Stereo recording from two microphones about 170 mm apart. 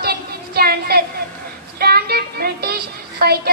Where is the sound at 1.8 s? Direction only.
65° right (ahead or behind).